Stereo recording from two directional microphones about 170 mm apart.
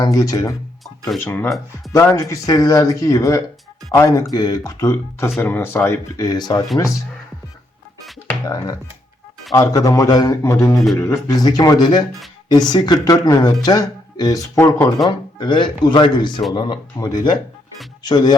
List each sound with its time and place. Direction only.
0.0 s speech: 20° left (ahead or behind)
1.5 s speech: centre (ahead or behind)
1.9 s speech: 15° left (ahead or behind)
8.4 s speech: 20° left (ahead or behind)
15.4 s speech: 30° left (ahead or behind)